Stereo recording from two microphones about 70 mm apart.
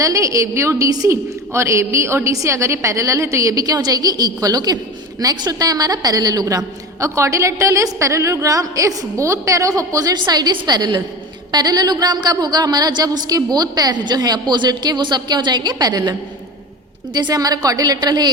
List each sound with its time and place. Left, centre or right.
0.0 s a woman's voice: right
11.5 s a woman's voice: right
17.2 s a woman's voice: right